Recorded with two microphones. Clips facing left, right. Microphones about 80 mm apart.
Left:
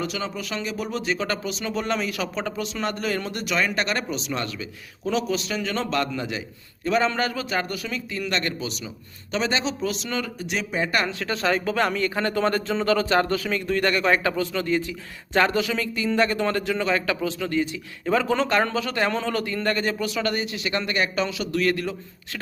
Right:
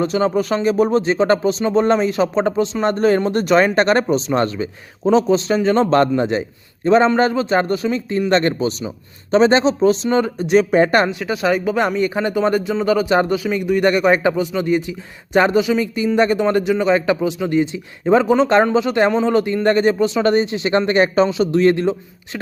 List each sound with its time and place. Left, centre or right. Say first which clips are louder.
0.0 s speech: right 12 dB; right
11.1 s speech: right 6 dB; centre